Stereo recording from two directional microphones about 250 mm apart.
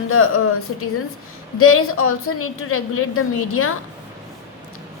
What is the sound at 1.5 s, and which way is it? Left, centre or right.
A woman's voice, left.